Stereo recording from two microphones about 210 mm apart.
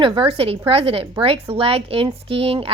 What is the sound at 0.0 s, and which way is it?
A woman's voice, 25° right (ahead or behind).